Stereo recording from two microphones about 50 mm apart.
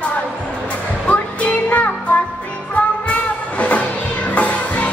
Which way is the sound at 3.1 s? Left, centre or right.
Left.